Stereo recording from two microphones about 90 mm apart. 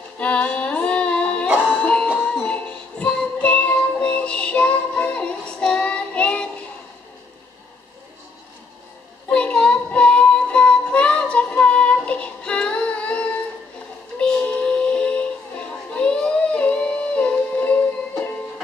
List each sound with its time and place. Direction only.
0.2 s female singing: 15° left (ahead or behind)
1.6 s music: 15° left (ahead or behind)
9.3 s child singing: 10° left (ahead or behind)
14.1 s music: 15° left (ahead or behind)